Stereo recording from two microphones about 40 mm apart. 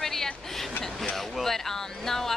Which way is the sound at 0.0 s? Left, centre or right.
Centre.